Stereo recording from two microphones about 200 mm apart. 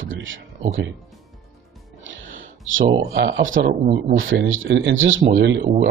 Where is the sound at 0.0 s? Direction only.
75° right (ahead or behind).